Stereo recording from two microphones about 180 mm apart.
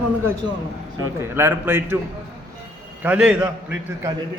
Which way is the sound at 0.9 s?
15° right (ahead or behind).